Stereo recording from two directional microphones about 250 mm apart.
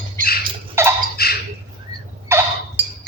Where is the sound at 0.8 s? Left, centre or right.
Centre.